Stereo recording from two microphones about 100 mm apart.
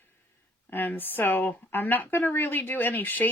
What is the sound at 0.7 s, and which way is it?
Speech, 20° left (ahead or behind).